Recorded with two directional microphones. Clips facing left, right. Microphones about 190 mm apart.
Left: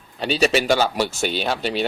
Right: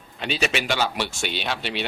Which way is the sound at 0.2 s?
35° left (ahead or behind).